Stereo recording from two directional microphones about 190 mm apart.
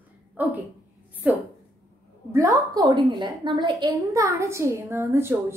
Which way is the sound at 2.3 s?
20° right (ahead or behind).